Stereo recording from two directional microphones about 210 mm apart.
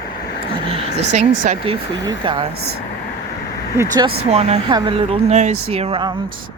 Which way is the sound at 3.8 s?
20° right (ahead or behind).